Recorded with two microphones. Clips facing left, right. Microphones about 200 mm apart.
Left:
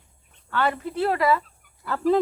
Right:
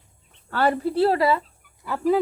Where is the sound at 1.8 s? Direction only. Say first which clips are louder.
Even; 10° right (ahead or behind).